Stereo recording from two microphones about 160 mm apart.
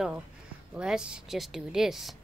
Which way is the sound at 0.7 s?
5° right (ahead or behind).